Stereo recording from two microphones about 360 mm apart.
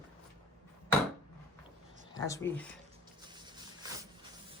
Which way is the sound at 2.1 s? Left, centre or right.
Centre.